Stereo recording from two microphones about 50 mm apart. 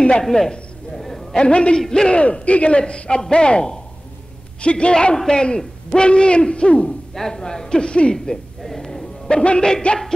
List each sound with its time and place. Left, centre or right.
0.2 s a man's voice: centre
1.3 s a man's voice: centre
7.2 s speech: centre